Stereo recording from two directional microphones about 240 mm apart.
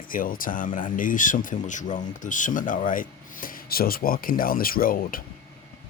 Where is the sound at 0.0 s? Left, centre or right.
Left.